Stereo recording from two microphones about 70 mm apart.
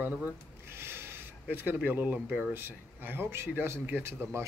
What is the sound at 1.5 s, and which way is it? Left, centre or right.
Speech, right.